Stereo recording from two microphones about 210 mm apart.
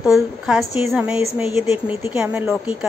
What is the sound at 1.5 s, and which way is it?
Speech, 30° left (ahead or behind).